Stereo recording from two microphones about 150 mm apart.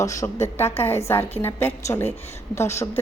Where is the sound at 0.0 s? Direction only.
20° left (ahead or behind).